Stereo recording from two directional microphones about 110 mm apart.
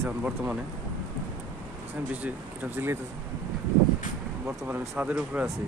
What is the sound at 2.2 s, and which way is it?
Speech, 15° right (ahead or behind).